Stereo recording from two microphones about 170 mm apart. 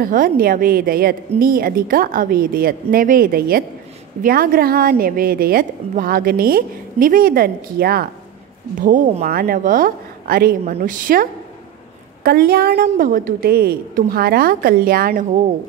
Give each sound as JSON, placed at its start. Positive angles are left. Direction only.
{"t": 0.0, "sound": "a woman's voice", "side_deg": -55}
{"t": 8.7, "sound": "a woman's voice", "side_deg": -50}